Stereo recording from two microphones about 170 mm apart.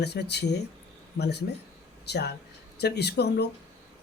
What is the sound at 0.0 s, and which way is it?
Speech, 75° left (ahead or behind).